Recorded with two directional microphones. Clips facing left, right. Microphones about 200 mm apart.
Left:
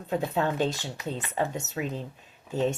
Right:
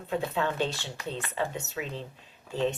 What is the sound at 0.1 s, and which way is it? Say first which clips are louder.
Speech: left 2 dB; 40° left (ahead or behind).